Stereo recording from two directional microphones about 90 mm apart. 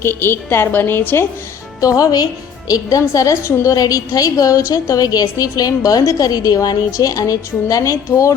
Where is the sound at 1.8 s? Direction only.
40° left (ahead or behind).